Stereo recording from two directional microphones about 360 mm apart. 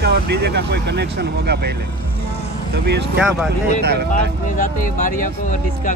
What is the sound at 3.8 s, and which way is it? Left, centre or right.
Speech, right.